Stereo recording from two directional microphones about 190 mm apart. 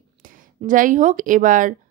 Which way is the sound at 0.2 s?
45° right (ahead or behind).